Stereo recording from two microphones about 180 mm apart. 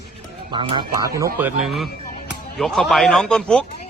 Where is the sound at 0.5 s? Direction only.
30° right (ahead or behind).